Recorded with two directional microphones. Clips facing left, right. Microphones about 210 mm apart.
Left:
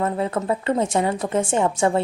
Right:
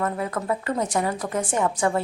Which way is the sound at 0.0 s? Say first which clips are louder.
Left 4 dB; 25° left (ahead or behind).